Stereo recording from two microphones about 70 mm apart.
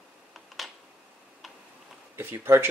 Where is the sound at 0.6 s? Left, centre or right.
Centre.